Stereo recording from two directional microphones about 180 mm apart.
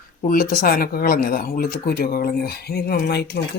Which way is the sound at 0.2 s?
50° left (ahead or behind).